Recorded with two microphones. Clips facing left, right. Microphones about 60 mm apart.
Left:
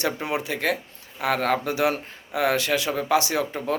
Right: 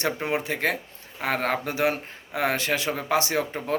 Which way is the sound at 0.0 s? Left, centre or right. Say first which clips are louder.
Even; right.